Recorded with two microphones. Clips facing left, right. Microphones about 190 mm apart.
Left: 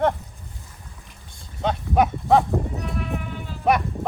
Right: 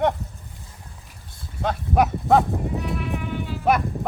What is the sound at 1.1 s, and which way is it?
Livestock, 5° right (ahead or behind).